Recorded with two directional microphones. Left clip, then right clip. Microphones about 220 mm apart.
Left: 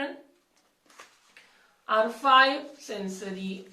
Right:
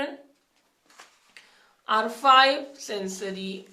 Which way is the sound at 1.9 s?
50° right (ahead or behind).